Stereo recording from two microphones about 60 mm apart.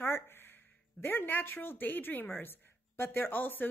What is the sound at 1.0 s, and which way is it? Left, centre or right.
A woman's voice, left.